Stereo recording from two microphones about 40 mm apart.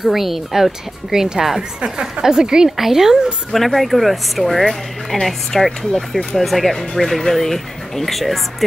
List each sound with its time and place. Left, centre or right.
0.0 s speech: centre
1.8 s speech: centre
3.5 s a woman's voice: centre